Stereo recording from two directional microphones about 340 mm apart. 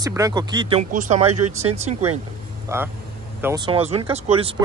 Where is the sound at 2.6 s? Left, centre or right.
Centre.